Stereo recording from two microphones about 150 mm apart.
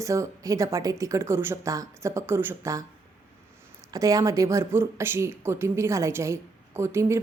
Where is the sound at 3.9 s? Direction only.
25° right (ahead or behind).